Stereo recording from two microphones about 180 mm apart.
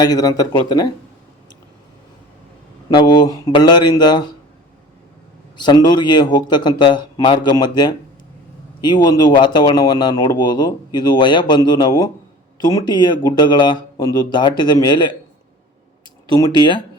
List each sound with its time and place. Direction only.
0.0 s speech: 20° left (ahead or behind)
2.9 s speech: 25° left (ahead or behind)
5.5 s speech: 25° left (ahead or behind)
16.3 s speech: 25° left (ahead or behind)